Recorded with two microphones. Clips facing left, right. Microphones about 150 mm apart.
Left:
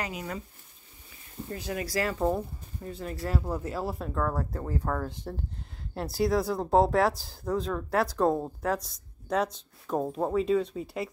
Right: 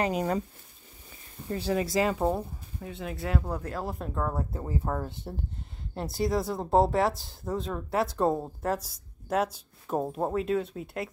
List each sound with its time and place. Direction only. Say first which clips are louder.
0.0 s speech: right 8 dB; 40° right (ahead or behind)
1.5 s speech: right 5 dB; 30° right (ahead or behind); by 4.1 s 5° left (ahead or behind)
4.1 s speech: left 1 dB; 15° right (ahead or behind)